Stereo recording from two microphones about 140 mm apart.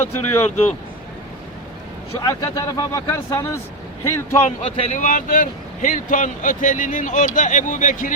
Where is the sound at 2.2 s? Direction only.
25° left (ahead or behind).